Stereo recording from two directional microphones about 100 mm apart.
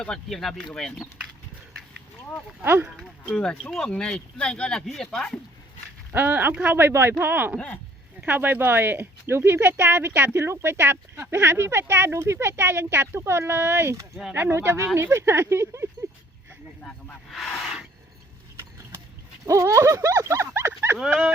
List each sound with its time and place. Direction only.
0.0 s speech: 5° left (ahead or behind)
2.6 s speech: 20° right (ahead or behind)
3.0 s speech: 5° left (ahead or behind)
6.1 s speech: 20° right (ahead or behind)
17.3 s gasp: 5° left (ahead or behind)
19.5 s speech: 35° right (ahead or behind)